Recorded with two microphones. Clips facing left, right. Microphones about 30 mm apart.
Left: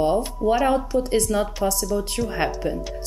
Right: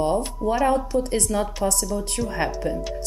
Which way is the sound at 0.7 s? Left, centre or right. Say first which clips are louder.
Left 1 dB; centre.